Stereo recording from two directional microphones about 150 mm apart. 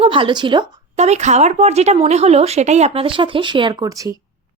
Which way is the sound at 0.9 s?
45° right (ahead or behind).